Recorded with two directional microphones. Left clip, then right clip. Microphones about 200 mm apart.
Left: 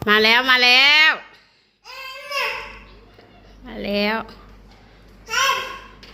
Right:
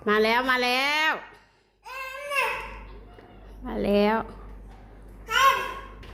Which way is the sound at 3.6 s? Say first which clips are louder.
Even; 30° right (ahead or behind).